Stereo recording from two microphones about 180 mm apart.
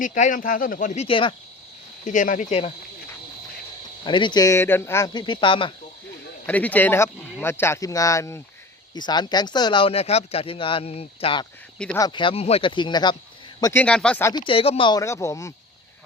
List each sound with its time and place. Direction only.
0.0 s speech: 45° left (ahead or behind)
1.0 s speech: 30° left (ahead or behind)
2.0 s speech: 45° left (ahead or behind)
4.0 s speech: 25° left (ahead or behind)
6.4 s speech: 10° left (ahead or behind)
13.8 s speech: 5° left (ahead or behind)
14.3 s speech: 30° left (ahead or behind)